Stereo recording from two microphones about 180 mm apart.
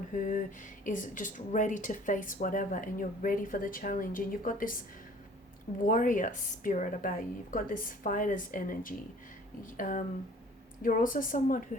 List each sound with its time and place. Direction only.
0.1 s speech: 50° left (ahead or behind)
5.8 s speech: 45° left (ahead or behind)